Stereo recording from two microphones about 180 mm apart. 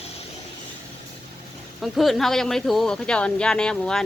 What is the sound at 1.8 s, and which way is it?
Speech, centre (ahead or behind).